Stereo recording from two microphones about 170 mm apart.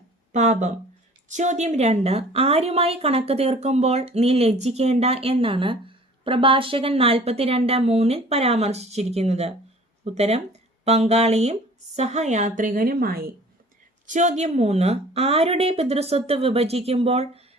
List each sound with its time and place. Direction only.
0.3 s a woman's voice: 45° right (ahead or behind); by 13.3 s 60° right (ahead or behind)
14.1 s a woman's voice: 45° right (ahead or behind)